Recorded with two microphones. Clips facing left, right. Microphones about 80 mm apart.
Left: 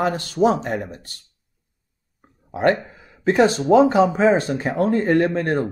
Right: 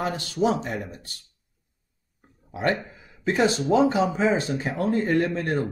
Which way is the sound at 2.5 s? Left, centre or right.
Left.